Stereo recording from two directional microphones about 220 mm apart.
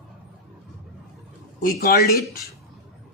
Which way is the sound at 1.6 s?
45° left (ahead or behind).